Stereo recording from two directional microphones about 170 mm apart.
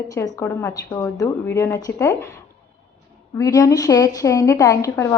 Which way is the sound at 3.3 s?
20° left (ahead or behind).